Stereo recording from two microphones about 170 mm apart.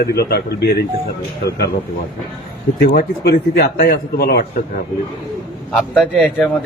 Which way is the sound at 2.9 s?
65° left (ahead or behind).